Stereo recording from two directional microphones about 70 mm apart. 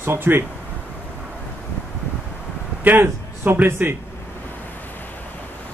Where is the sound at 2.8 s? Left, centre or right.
Right.